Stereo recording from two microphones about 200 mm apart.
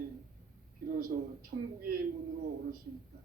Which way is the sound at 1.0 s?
45° right (ahead or behind).